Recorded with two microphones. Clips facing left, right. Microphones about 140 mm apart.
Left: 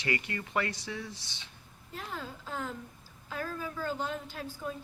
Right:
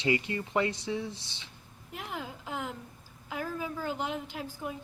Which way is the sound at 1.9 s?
15° right (ahead or behind).